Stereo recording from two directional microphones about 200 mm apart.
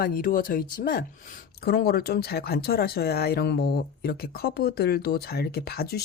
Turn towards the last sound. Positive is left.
turn(degrees=50)  # may be behind; listen again after turning